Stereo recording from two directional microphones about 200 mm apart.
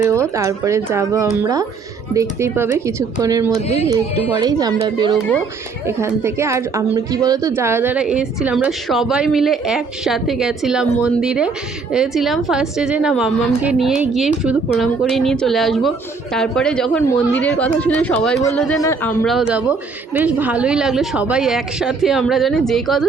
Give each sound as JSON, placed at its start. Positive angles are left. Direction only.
{"t": 0.1, "sound": "a woman's voice", "side_deg": -15}
{"t": 18.8, "sound": "speech", "side_deg": 15}
{"t": 19.2, "sound": "a woman's voice", "side_deg": 0}